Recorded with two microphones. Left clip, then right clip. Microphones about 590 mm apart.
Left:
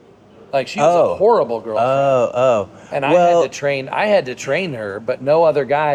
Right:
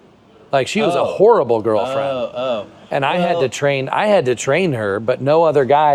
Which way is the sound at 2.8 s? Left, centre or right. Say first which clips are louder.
Left 3 dB; right.